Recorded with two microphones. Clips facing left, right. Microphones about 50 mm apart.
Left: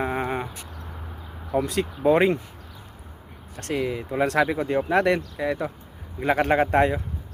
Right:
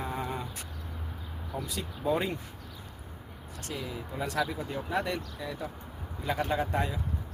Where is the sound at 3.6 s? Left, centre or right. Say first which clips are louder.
Left 11 dB; left.